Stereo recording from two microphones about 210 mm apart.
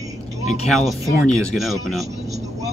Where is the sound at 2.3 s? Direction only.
30° right (ahead or behind).